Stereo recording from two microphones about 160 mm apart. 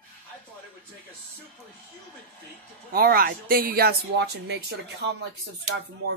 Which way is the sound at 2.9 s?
70° right (ahead or behind).